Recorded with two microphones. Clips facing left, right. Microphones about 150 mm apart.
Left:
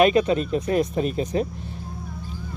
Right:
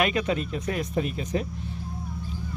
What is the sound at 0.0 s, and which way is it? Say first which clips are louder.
Speech: left 7 dB; 30° left (ahead or behind).